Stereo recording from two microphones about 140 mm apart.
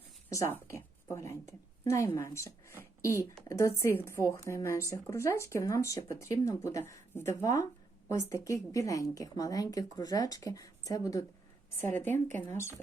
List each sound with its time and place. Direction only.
0.3 s speech: 20° left (ahead or behind)